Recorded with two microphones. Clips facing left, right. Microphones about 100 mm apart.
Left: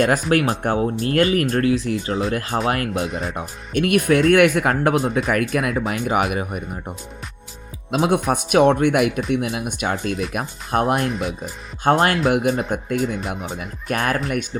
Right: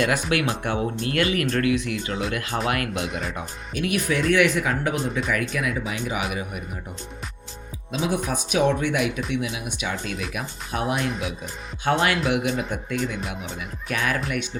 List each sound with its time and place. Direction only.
0.0 s speech: 40° left (ahead or behind)
3.8 s speech: 55° left (ahead or behind)
7.9 s speech: 60° left (ahead or behind)